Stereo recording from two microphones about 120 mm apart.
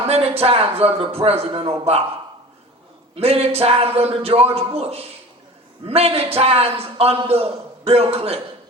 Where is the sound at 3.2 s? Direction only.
55° right (ahead or behind).